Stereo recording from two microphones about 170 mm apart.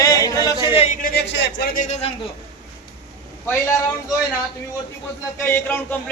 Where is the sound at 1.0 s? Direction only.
80° left.